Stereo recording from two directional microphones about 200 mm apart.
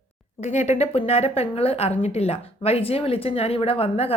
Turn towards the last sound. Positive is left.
turn(degrees=30)  # may be behind; listen again after turning